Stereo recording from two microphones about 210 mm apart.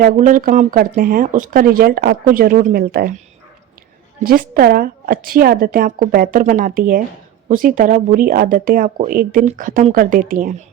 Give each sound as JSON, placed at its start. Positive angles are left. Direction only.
{"t": 0.0, "sound": "speech", "side_deg": -40}
{"t": 4.2, "sound": "speech", "side_deg": -45}